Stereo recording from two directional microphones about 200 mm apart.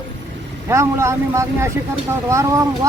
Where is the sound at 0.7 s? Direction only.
15° right (ahead or behind).